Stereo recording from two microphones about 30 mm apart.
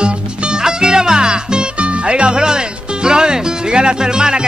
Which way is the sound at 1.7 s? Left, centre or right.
Right.